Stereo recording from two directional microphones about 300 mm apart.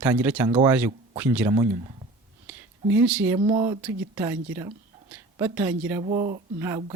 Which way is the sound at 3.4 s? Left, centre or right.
Centre.